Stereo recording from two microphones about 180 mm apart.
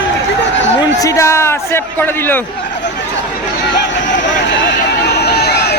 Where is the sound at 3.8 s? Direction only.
80° left; by 5.7 s 65° left (ahead or behind).